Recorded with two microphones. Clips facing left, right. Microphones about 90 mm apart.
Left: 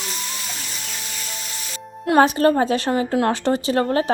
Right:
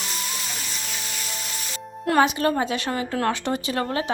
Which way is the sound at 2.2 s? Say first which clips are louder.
Left 5 dB; 35° left (ahead or behind).